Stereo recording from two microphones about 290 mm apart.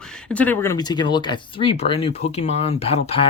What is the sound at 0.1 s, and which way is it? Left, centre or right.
Speech, centre.